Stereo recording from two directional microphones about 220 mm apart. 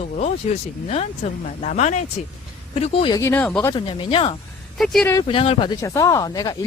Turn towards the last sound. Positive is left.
turn(degrees=15)  # may be behind; listen again after turning